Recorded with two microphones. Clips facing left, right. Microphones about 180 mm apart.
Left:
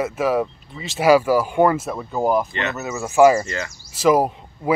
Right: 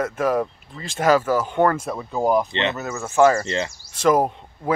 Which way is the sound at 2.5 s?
25° right (ahead or behind).